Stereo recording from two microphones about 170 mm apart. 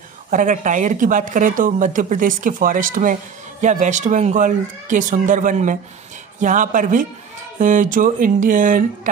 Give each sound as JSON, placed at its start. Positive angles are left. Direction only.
{"t": 0.3, "sound": "speech", "side_deg": -50}